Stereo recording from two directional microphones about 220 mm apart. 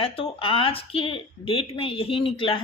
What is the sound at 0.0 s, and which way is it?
A woman's voice, 25° left (ahead or behind).